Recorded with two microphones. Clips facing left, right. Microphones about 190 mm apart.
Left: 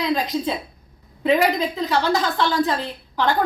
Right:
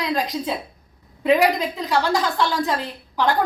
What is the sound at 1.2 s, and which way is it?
A woman's voice, 5° right (ahead or behind).